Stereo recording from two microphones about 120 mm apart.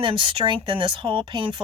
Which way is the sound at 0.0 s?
45° right (ahead or behind).